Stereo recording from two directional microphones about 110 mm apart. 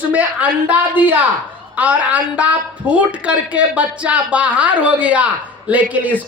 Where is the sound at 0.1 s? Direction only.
15° right (ahead or behind).